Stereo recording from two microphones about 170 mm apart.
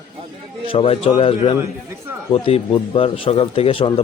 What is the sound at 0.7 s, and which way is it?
Speech, 35° left (ahead or behind).